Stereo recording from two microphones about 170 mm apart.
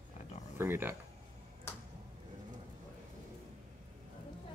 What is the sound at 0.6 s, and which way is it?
Speech, 15° right (ahead or behind).